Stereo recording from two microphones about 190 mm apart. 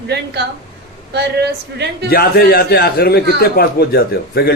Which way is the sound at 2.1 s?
55° left (ahead or behind).